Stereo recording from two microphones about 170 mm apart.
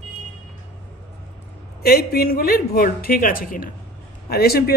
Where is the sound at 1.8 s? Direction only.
65° left (ahead or behind).